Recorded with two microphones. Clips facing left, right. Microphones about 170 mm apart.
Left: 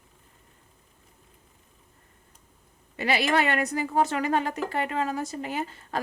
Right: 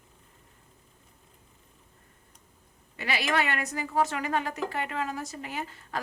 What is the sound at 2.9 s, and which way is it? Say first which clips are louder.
Speech: left 4 dB; 30° left (ahead or behind).